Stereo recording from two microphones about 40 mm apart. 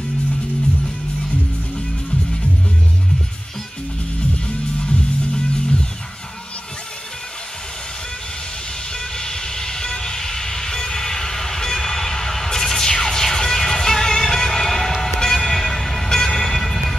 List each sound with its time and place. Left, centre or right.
4.5 s music: left
8.9 s vehicle: centre